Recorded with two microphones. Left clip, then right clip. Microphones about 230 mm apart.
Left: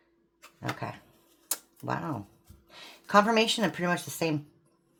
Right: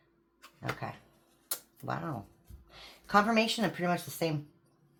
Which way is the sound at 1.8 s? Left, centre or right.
Left.